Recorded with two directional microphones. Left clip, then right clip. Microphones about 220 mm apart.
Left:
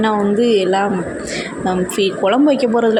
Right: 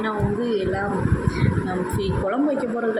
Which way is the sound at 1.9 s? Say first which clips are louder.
Left 10 dB; 40° left (ahead or behind).